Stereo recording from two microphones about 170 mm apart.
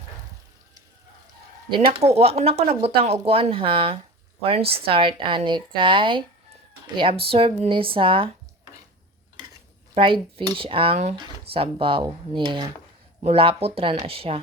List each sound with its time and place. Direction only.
2.1 s speech: 35° right (ahead or behind)
9.9 s speech: 30° right (ahead or behind)